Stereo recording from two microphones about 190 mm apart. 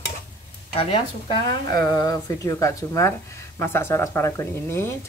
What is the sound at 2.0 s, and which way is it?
Speech, 15° left (ahead or behind).